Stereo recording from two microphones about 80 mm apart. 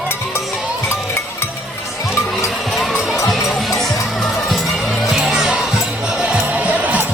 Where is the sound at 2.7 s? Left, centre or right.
Centre.